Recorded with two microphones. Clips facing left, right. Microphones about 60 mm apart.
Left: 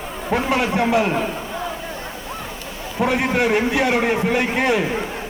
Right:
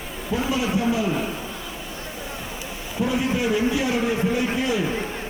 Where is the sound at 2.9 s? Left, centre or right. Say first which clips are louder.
Left 4 dB; left.